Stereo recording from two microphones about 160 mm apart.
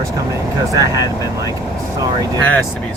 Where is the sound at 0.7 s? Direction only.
20° right (ahead or behind).